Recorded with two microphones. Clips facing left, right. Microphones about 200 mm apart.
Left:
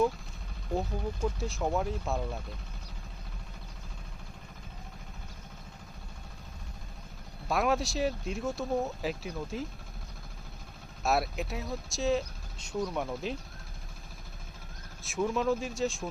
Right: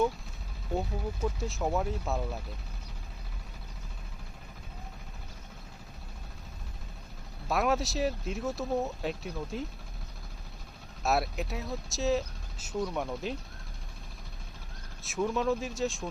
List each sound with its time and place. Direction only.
0.8 s speech: centre (ahead or behind)
7.4 s speech: centre (ahead or behind)
11.0 s speech: centre (ahead or behind)
15.0 s speech: centre (ahead or behind)